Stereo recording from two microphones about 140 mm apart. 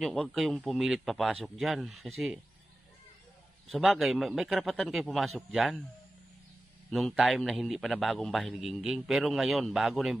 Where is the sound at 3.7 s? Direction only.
Centre (ahead or behind).